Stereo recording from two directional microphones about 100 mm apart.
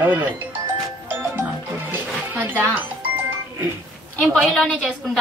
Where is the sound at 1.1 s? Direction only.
20° right (ahead or behind).